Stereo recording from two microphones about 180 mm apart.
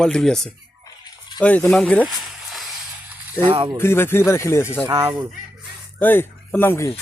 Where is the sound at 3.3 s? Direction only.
30° right (ahead or behind).